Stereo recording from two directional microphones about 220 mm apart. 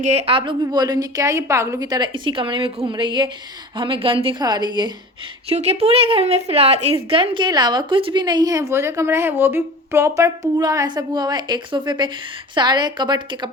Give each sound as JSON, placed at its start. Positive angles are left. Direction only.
{"t": 0.0, "sound": "a woman's voice", "side_deg": -30}